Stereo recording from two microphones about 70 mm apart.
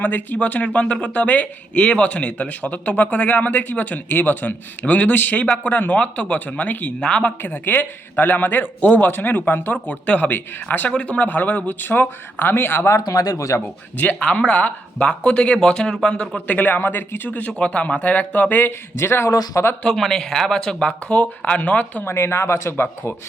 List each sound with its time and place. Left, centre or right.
0.0 s speech: left
7.4 s speech: left
13.0 s speech: left
13.9 s speech: centre
18.9 s speech: left
19.8 s speech: centre
22.0 s speech: left